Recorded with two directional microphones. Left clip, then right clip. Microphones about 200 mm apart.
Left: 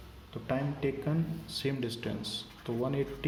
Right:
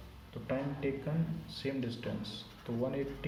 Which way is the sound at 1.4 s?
60° left (ahead or behind).